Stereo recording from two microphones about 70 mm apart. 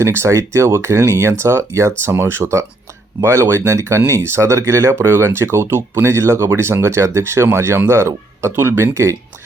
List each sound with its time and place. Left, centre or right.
0.0 s speech: right